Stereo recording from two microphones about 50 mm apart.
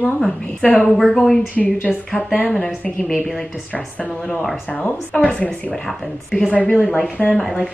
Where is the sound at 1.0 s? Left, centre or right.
Centre.